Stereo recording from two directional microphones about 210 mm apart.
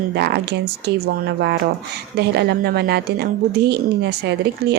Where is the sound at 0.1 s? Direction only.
50° right (ahead or behind).